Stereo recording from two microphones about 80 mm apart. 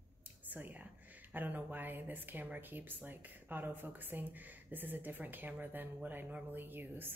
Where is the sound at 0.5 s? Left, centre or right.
Right.